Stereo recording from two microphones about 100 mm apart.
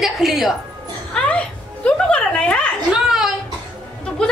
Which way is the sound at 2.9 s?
5° right (ahead or behind).